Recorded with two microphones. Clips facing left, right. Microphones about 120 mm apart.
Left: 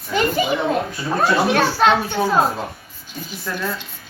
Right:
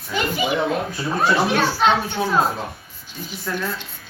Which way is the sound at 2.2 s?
35° left (ahead or behind).